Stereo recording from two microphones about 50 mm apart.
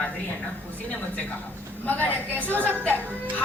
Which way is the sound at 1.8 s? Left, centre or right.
Left.